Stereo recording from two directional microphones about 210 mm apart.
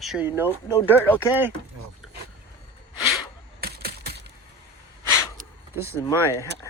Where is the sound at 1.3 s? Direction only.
10° right (ahead or behind).